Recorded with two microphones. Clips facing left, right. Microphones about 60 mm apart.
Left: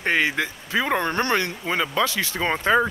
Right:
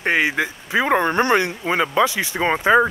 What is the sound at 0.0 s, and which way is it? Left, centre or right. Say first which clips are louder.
Speech: right 3 dB; centre.